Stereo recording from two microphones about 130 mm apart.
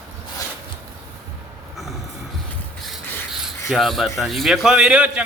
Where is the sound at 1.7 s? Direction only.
Centre (ahead or behind).